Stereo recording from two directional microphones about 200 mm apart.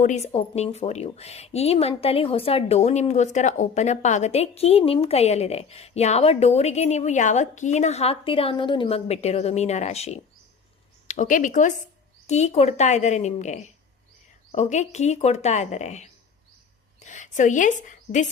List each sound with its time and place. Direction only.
0.0 s a woman's voice: 35° left (ahead or behind)